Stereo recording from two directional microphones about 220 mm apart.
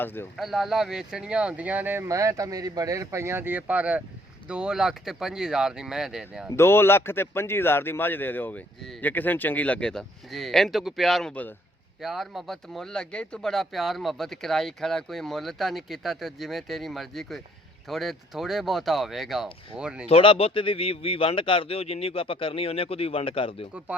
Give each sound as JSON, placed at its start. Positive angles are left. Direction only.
{"t": 0.0, "sound": "a man's voice", "side_deg": 10}
{"t": 0.3, "sound": "speech", "side_deg": 0}
{"t": 6.6, "sound": "a man's voice", "side_deg": 10}
{"t": 20.1, "sound": "speech", "side_deg": 25}